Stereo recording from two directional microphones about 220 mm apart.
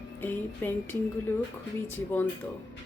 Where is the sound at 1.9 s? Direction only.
10° left (ahead or behind).